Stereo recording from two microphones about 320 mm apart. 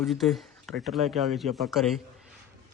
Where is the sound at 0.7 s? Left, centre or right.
Right.